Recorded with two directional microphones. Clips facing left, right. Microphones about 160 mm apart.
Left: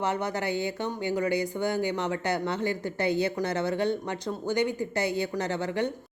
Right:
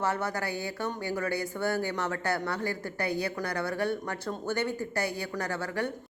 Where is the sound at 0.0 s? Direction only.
20° left (ahead or behind).